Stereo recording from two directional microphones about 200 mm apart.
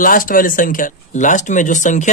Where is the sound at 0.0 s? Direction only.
45° left (ahead or behind).